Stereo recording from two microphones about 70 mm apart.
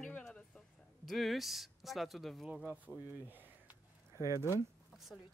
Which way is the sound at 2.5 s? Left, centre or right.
Right.